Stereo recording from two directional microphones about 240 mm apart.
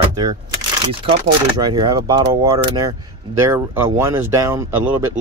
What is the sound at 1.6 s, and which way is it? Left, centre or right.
Speech, centre.